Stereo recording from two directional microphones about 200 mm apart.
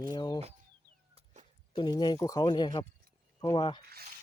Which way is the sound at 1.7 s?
20° left (ahead or behind).